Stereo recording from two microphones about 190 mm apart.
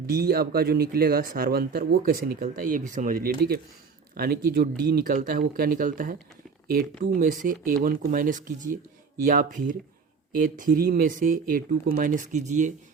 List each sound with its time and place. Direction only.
0.1 s speech: 55° right (ahead or behind); by 12.7 s 40° right (ahead or behind)